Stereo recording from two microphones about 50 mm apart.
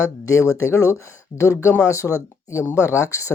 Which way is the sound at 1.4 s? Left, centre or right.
Left.